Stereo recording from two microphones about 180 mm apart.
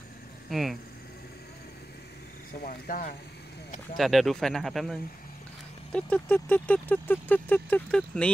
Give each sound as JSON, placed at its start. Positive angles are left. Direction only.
{"t": 0.5, "sound": "speech", "side_deg": 0}
{"t": 2.6, "sound": "speech", "side_deg": 55}
{"t": 3.9, "sound": "speech", "side_deg": 0}